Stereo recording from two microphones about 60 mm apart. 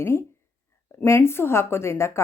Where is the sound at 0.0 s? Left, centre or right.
Left.